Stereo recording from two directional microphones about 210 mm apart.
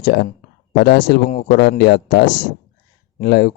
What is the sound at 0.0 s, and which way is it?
A man's voice, 50° left (ahead or behind).